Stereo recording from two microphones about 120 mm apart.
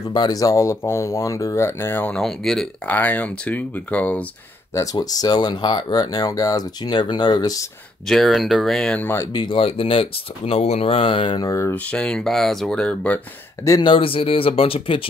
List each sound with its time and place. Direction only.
0.1 s speech: 35° left (ahead or behind); by 2.2 s 15° left (ahead or behind)
2.2 s speech: 5° left (ahead or behind)
4.7 s speech: 30° left (ahead or behind)
8.1 s speech: centre (ahead or behind)
9.0 s speech: 20° left (ahead or behind)
9.3 s speech: 40° left (ahead or behind)
11.4 s speech: 25° left (ahead or behind)
11.7 s speech: 10° left (ahead or behind)
13.7 s speech: 40° left (ahead or behind)